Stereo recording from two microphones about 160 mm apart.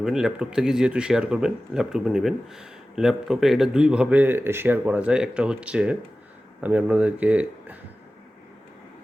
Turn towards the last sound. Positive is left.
turn(degrees=-10)  # may be behind; listen again after turning